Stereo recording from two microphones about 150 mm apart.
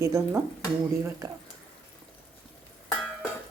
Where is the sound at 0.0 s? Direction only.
20° right (ahead or behind).